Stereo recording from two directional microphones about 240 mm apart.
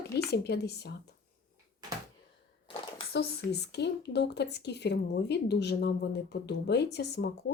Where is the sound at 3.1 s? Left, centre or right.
Left.